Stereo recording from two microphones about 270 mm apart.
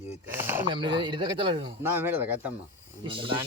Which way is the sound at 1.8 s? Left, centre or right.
Centre.